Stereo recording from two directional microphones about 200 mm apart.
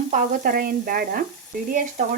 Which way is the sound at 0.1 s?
40° right (ahead or behind).